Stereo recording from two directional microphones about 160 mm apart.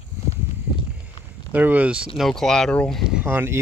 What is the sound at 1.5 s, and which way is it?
Speech, 10° right (ahead or behind).